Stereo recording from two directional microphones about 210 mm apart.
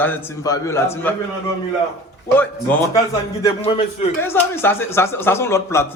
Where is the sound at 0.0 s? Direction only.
15° left (ahead or behind).